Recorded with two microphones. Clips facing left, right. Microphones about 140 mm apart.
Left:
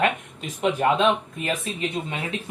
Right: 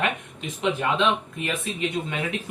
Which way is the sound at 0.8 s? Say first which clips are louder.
Left 5 dB; 35° left (ahead or behind).